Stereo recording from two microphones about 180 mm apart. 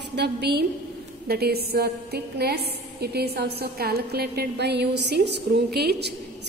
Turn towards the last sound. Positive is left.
turn(degrees=-65)  # may be behind; listen again after turning